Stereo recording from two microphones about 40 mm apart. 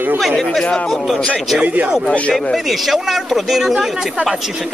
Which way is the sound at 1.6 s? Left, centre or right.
Right.